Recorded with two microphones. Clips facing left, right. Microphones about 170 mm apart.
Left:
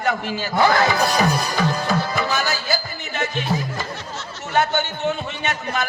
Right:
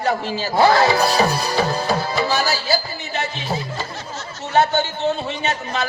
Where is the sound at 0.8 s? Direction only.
50° left (ahead or behind).